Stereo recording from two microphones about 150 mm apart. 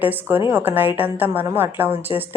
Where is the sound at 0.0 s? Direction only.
10° right (ahead or behind).